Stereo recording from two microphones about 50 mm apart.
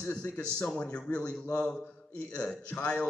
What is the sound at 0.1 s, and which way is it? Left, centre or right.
A man's voice, left.